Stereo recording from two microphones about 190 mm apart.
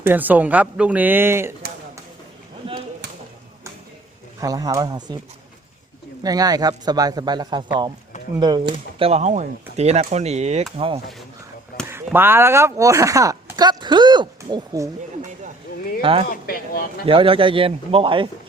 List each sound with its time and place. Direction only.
0.0 s speech: 10° right (ahead or behind)
4.4 s a man's voice: 20° right (ahead or behind)
6.2 s a man's voice: 20° right (ahead or behind)
9.0 s speech: 35° right (ahead or behind)
11.9 s a sound: 10° right (ahead or behind)
16.0 s a man's voice: 30° right (ahead or behind)
16.3 s speech: 50° left (ahead or behind)
17.1 s a man's voice: 30° right (ahead or behind)